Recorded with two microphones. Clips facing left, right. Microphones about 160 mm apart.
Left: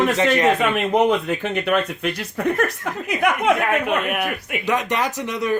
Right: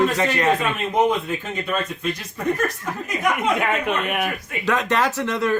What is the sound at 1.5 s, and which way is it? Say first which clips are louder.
Speech: left 6 dB; 70° left (ahead or behind).